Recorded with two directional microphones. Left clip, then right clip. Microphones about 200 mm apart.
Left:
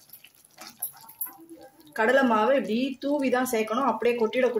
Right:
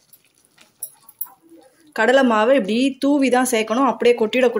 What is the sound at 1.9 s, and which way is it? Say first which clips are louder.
Speech: right 6 dB; 45° right (ahead or behind).